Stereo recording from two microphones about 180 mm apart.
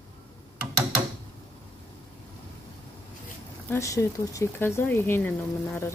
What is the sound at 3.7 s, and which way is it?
Speech, 15° left (ahead or behind).